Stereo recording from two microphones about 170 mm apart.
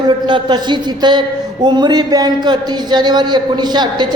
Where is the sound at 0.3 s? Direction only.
30° right (ahead or behind).